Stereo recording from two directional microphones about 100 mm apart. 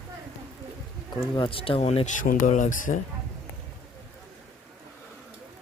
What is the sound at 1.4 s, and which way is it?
Speech, 65° left (ahead or behind).